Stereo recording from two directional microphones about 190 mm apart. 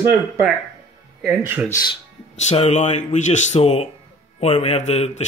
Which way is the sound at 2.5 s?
35° left (ahead or behind).